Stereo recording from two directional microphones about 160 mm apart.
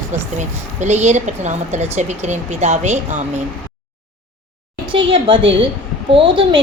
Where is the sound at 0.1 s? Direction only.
45° right (ahead or behind).